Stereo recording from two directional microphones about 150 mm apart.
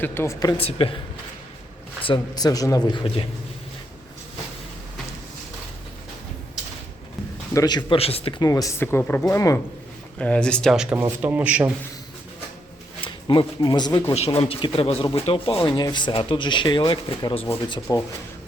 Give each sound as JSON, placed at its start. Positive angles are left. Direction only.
{"t": 0.0, "sound": "speech", "side_deg": 15}
{"t": 0.5, "sound": "speech", "side_deg": 40}
{"t": 2.0, "sound": "speech", "side_deg": 25}
{"t": 7.5, "sound": "speech", "side_deg": 25}
{"t": 8.4, "sound": "speech", "side_deg": 25}
{"t": 10.2, "sound": "a man's voice", "side_deg": 10}
{"t": 13.1, "sound": "speech", "side_deg": 30}
{"t": 14.1, "sound": "speech", "side_deg": 40}
{"t": 17.9, "sound": "speech", "side_deg": 25}